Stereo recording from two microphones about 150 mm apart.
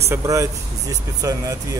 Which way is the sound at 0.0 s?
20° right (ahead or behind).